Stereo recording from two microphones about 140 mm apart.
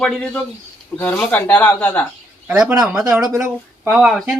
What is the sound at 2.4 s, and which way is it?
Speech, 5° right (ahead or behind).